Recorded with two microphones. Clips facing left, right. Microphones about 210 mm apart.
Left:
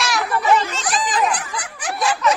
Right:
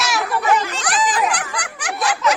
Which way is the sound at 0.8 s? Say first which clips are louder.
Right 1 dB; 75° right (ahead or behind).